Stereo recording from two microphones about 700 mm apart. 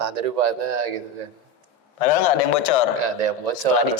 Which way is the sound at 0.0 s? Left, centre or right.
Right.